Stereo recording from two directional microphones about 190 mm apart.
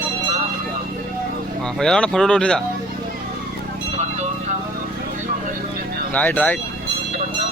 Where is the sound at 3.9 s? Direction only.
35° right (ahead or behind).